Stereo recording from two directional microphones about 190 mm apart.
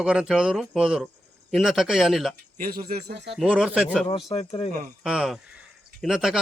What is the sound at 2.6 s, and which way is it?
Speech, 50° right (ahead or behind).